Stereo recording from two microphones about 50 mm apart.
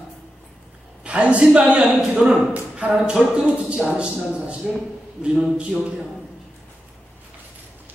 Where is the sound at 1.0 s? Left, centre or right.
Right.